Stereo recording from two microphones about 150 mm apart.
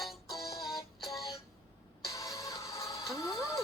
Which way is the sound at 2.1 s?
20° left (ahead or behind).